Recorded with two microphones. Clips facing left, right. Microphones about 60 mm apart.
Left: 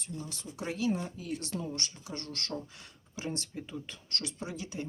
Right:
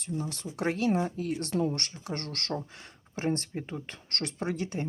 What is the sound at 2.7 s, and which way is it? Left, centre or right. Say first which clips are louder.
Speech: right 5 dB; right.